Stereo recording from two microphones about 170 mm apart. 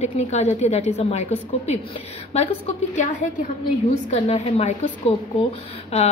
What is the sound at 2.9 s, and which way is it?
A woman's voice, 50° left (ahead or behind).